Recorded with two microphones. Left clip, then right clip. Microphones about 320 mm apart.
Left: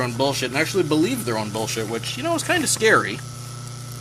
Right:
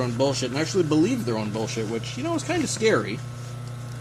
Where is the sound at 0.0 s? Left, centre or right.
Left.